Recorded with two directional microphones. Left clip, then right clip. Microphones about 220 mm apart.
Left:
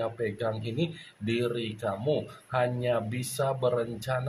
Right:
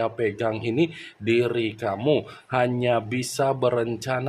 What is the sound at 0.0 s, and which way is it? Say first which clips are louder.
Speech: right 6 dB; 45° right (ahead or behind).